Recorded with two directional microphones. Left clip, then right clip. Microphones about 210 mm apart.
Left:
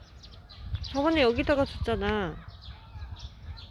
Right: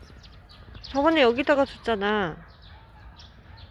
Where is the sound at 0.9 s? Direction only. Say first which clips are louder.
Right 4 dB; 5° right (ahead or behind).